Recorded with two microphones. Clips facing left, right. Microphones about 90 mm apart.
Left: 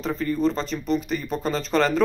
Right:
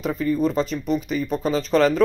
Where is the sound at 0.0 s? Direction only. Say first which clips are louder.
Right 2 dB; 5° right (ahead or behind).